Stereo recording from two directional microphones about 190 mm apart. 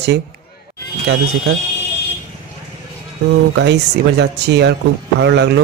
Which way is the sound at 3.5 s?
65° right (ahead or behind).